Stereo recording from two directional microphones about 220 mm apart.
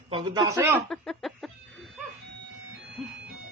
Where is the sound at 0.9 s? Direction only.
Centre (ahead or behind).